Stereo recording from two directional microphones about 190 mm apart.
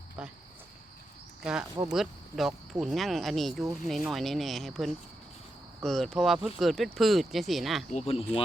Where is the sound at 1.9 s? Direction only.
Centre (ahead or behind).